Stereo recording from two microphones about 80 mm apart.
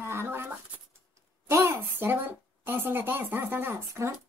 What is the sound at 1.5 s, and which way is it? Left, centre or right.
Speech, right.